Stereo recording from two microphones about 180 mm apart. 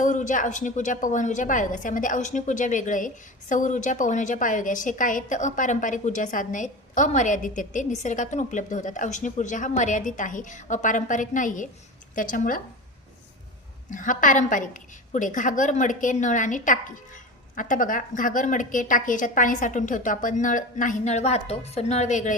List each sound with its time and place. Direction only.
0.0 s a woman's voice: 45° left (ahead or behind)
13.9 s a woman's voice: 45° left (ahead or behind)